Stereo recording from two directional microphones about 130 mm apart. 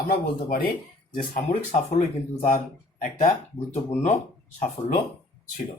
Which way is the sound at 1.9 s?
70° left (ahead or behind).